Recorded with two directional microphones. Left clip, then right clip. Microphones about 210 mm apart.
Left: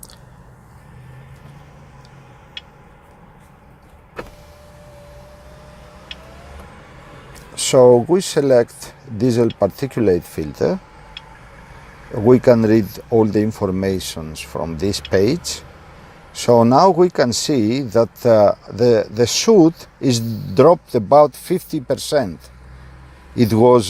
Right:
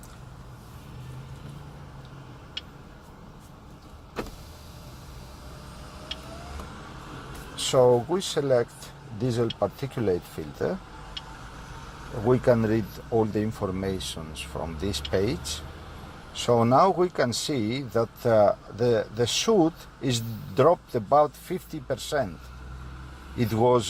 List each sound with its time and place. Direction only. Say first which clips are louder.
7.5 s speech: left 10 dB; 45° left (ahead or behind)
12.2 s speech: left 10 dB; 40° left (ahead or behind)
23.4 s speech: left 10 dB; 40° left (ahead or behind)